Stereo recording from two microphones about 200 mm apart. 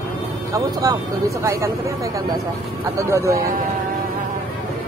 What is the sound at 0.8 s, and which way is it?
Speech, 20° right (ahead or behind).